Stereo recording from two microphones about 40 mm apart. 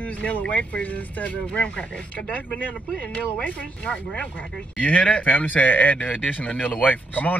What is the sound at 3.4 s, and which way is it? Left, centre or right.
Speech, left.